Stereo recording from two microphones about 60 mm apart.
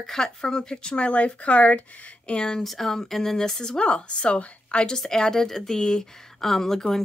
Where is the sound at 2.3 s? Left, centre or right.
Centre.